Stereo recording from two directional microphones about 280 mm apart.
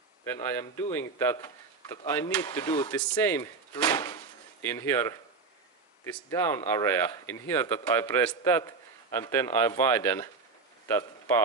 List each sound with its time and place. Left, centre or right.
0.2 s speech: centre